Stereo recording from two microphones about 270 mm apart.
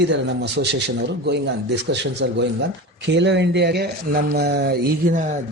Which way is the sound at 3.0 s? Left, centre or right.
Right.